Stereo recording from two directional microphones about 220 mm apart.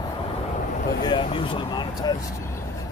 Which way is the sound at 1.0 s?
25° left (ahead or behind).